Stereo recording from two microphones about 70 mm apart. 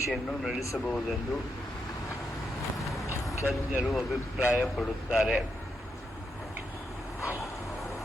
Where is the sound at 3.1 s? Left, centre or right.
Left.